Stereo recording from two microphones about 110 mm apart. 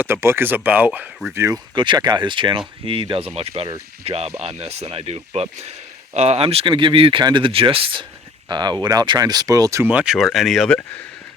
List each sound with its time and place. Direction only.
0.0 s speech: 20° right (ahead or behind)
1.7 s speech: 45° right (ahead or behind)
8.4 s speech: 40° right (ahead or behind)
9.8 s speech: 10° right (ahead or behind)